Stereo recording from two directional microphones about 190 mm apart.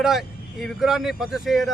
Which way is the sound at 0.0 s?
Centre (ahead or behind).